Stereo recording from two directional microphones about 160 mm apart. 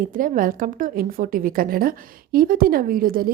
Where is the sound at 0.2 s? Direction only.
55° right (ahead or behind).